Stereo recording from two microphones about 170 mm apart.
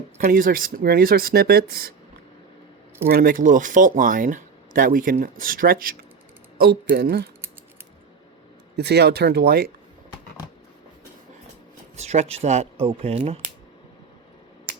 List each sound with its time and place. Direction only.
0.2 s speech: 55° right (ahead or behind)
3.1 s speech: 55° right (ahead or behind)
6.9 s speech: 70° right (ahead or behind)
8.7 s speech: 80° right; by 9.7 s 60° right (ahead or behind)
11.9 s speech: 40° right (ahead or behind)